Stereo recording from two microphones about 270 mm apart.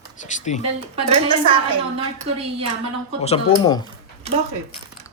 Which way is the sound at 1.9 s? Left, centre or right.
Right.